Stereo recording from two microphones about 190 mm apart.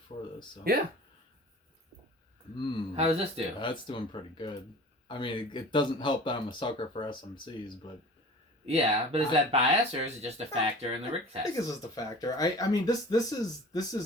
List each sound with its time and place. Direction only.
0.1 s speech: 35° left (ahead or behind)
0.7 s speech: 50° right (ahead or behind)
2.6 s speech: 25° left (ahead or behind)
2.9 s speech: 35° right (ahead or behind)
3.6 s speech: 25° left (ahead or behind)
8.6 s speech: 35° right (ahead or behind)
11.9 s speech: 20° left (ahead or behind)